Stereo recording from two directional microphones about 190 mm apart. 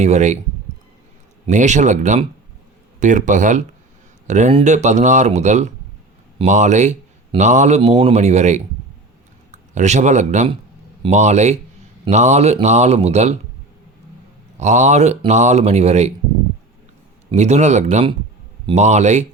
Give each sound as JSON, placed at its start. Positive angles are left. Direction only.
{"t": 0.0, "sound": "speech", "side_deg": -35}
{"t": 1.5, "sound": "speech", "side_deg": -40}
{"t": 14.6, "sound": "speech", "side_deg": -40}
{"t": 17.3, "sound": "speech", "side_deg": -35}